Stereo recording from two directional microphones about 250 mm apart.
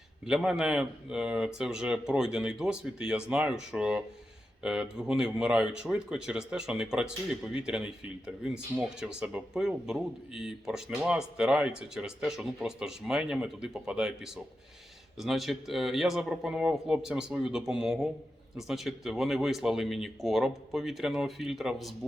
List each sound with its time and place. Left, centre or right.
0.3 s speech: centre